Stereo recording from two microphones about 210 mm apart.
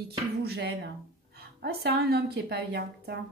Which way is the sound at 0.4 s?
50° right (ahead or behind).